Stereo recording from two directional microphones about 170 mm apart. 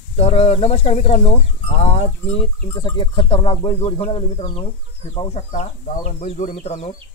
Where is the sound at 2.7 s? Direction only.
25° left (ahead or behind).